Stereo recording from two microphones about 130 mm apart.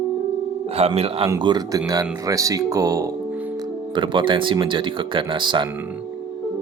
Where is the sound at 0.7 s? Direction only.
55° right (ahead or behind).